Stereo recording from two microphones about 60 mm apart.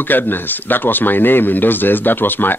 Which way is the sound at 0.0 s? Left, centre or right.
Left.